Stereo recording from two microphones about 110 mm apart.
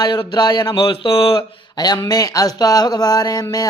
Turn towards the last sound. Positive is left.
turn(degrees=35)  # may be behind; listen again after turning